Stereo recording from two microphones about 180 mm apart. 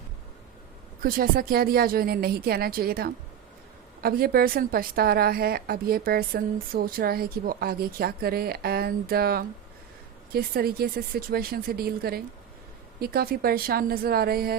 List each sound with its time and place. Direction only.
1.0 s speech: 55° right (ahead or behind)